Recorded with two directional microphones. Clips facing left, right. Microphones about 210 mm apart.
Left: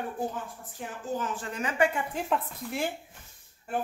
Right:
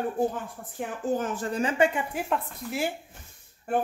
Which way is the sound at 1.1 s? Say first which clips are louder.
Right 5 dB; 40° right (ahead or behind).